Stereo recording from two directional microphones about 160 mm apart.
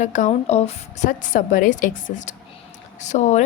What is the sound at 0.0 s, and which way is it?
A woman's voice, 50° left (ahead or behind).